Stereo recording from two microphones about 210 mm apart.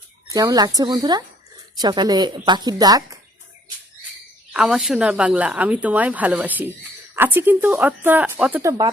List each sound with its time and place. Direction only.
0.3 s speech: 15° right (ahead or behind)
4.5 s speech: centre (ahead or behind)